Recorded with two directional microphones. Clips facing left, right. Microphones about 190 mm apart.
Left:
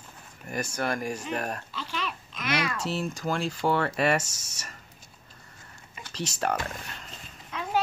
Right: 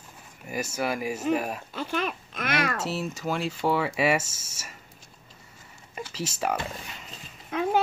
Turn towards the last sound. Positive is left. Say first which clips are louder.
# right 4 dB
turn(degrees=-50)  # may be behind; listen again after turning